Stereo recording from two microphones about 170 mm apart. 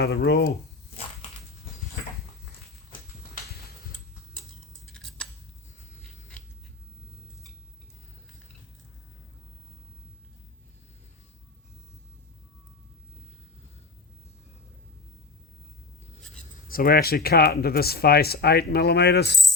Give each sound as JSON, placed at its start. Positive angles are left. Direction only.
{"t": 0.0, "sound": "speech", "side_deg": 65}
{"t": 4.9, "sound": "scissors", "side_deg": 5}
{"t": 16.6, "sound": "speech", "side_deg": 60}